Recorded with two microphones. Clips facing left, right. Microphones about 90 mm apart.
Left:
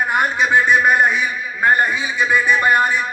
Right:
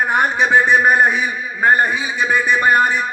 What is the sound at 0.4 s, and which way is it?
A man's voice, 30° right (ahead or behind).